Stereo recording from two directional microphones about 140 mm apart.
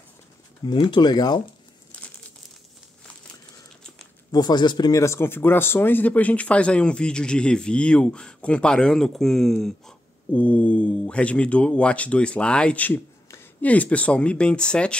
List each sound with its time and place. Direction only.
0.7 s speech: 35° left (ahead or behind)
4.3 s speech: 30° left (ahead or behind); by 15.0 s 5° left (ahead or behind)